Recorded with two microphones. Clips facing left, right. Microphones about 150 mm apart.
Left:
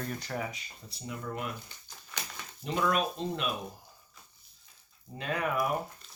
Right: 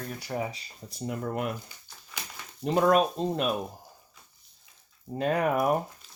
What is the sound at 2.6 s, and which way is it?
Speech, 40° right (ahead or behind).